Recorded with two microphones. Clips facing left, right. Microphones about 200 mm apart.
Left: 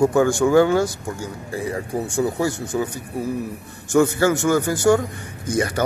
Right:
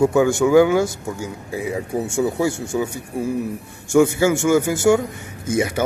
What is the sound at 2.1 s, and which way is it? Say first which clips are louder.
Speech: right 1 dB; 25° right (ahead or behind).